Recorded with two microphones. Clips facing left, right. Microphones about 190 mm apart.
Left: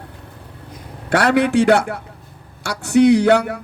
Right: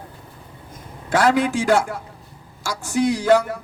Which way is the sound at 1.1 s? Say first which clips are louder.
Left 2 dB; 65° left (ahead or behind).